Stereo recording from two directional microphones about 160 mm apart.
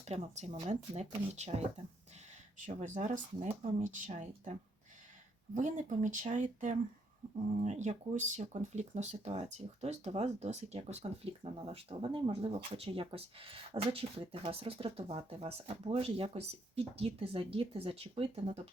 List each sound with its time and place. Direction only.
0.0 s speech: 40° right (ahead or behind)
2.6 s speech: 50° right (ahead or behind)
5.5 s speech: 50° right (ahead or behind)